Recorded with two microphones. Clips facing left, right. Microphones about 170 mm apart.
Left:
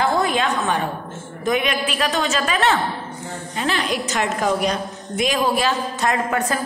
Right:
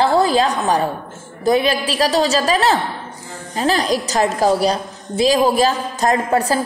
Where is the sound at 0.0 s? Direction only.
30° right (ahead or behind).